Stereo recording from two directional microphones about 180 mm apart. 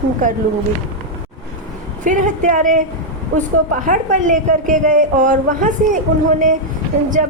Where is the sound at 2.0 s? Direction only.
45° right (ahead or behind).